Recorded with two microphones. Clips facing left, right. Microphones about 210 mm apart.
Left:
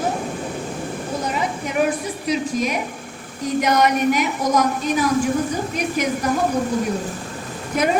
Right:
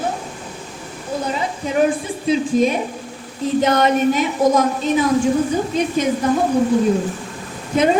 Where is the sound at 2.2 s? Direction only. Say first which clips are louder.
Right 6 dB; 25° right (ahead or behind).